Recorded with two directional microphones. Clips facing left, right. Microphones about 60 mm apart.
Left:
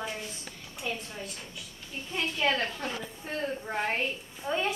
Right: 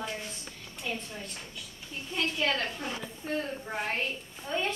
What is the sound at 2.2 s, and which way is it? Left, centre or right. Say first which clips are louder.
A woman's voice: left 1 dB; centre.